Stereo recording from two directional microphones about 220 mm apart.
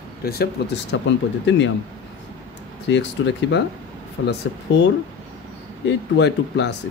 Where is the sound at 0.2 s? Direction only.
45° left (ahead or behind).